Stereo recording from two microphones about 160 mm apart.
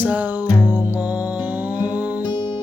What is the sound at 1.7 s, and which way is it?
Music, 10° right (ahead or behind).